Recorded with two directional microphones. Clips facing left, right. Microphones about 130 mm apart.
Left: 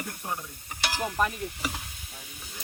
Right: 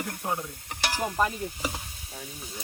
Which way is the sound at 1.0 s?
30° right (ahead or behind).